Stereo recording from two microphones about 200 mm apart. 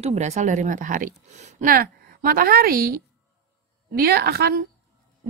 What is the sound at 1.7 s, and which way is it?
A woman's voice, 45° right (ahead or behind).